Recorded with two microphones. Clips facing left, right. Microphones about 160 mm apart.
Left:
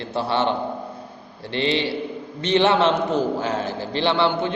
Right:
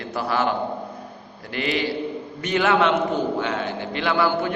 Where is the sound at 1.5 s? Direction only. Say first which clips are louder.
Left 2 dB; 25° left (ahead or behind).